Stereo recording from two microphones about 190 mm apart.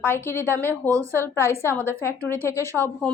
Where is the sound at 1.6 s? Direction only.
10° left (ahead or behind).